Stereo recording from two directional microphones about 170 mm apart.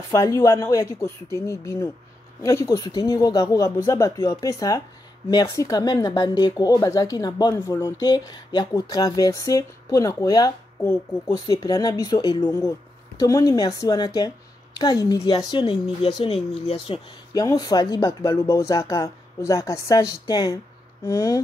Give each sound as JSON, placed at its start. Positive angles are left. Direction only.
{"t": 0.1, "sound": "speech", "side_deg": 20}
{"t": 12.4, "sound": "speech", "side_deg": 15}
{"t": 17.3, "sound": "speech", "side_deg": 20}